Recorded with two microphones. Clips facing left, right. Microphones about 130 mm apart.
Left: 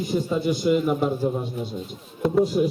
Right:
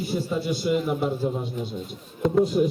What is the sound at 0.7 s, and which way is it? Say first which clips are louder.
Speech: left 3 dB; 45° left (ahead or behind).